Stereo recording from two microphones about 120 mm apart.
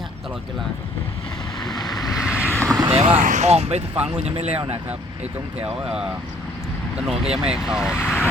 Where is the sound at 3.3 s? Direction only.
75° right (ahead or behind).